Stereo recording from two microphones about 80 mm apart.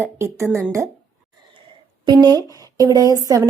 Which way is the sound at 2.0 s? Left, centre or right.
Right.